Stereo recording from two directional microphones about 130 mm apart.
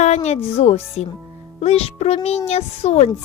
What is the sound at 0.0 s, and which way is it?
Speech, 55° left (ahead or behind).